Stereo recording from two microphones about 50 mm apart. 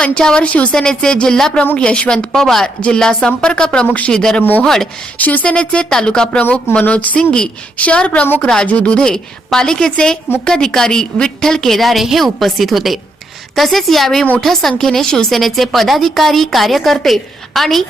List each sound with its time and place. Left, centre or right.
0.0 s a woman's voice: centre
2.8 s a woman's voice: centre
5.1 s a woman's voice: left; by 6.4 s centre
6.8 s a woman's voice: left
7.2 s a woman's voice: centre
9.0 s a woman's voice: centre
15.3 s a woman's voice: centre